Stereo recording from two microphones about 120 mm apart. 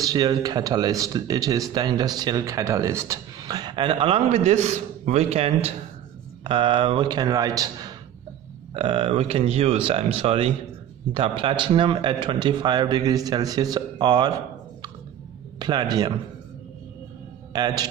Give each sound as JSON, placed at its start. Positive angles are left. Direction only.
{"t": 0.0, "sound": "speech", "side_deg": -35}
{"t": 6.4, "sound": "speech", "side_deg": -45}
{"t": 8.7, "sound": "speech", "side_deg": -55}
{"t": 15.6, "sound": "speech", "side_deg": -35}
{"t": 17.5, "sound": "a man's voice", "side_deg": -35}